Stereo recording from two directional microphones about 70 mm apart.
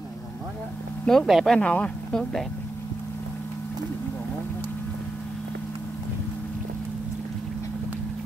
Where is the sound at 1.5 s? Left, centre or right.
Centre.